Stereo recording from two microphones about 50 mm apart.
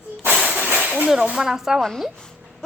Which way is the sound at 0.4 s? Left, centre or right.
Right.